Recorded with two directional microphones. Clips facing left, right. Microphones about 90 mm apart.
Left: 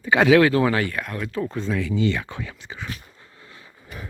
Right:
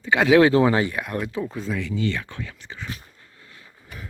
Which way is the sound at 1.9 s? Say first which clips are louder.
Left 3 dB; 15° left (ahead or behind).